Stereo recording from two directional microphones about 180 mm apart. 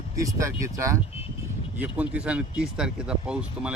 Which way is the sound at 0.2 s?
15° right (ahead or behind).